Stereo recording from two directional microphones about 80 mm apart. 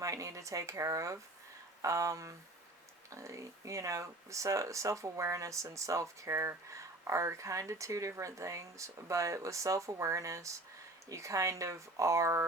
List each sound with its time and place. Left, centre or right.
0.0 s speech: right